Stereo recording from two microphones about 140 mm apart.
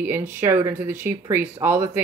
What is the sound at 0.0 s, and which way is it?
Speech, 15° right (ahead or behind).